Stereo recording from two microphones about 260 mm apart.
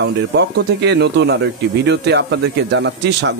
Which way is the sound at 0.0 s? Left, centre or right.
Right.